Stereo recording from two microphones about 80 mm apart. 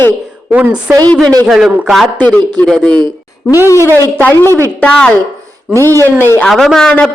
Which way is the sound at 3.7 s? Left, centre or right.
Left.